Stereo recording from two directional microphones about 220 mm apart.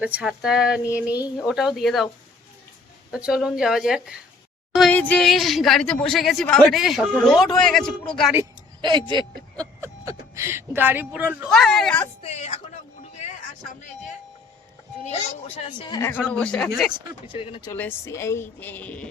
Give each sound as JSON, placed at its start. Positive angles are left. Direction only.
{"t": 0.0, "sound": "speech", "side_deg": -5}
{"t": 3.1, "sound": "speech", "side_deg": -5}
{"t": 8.8, "sound": "speech", "side_deg": -20}
{"t": 12.2, "sound": "speech", "side_deg": 30}
{"t": 13.0, "sound": "a sound", "side_deg": 30}
{"t": 15.2, "sound": "speech", "side_deg": 25}
{"t": 17.3, "sound": "speech", "side_deg": 20}